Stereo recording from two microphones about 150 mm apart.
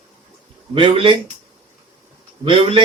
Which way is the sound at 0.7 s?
35° right (ahead or behind).